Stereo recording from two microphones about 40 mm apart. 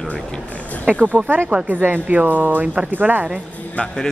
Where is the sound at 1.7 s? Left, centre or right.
Right.